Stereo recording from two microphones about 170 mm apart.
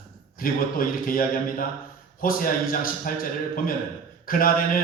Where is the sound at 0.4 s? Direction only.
55° left (ahead or behind).